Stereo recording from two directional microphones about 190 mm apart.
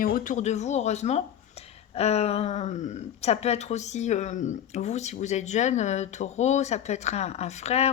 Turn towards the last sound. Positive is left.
turn(degrees=35)  # may be behind; listen again after turning